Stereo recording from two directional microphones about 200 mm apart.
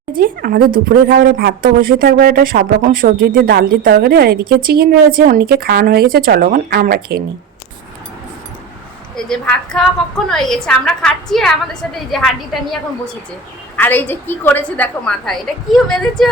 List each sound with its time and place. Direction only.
0.2 s a woman's voice: 50° right (ahead or behind)
9.1 s a woman's voice: 5° left (ahead or behind)
13.7 s a woman's voice: 10° left (ahead or behind)